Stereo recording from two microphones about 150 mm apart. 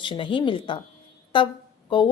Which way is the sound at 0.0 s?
35° left (ahead or behind).